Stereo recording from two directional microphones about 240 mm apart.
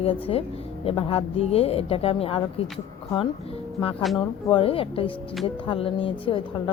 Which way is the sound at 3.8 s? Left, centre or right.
Left.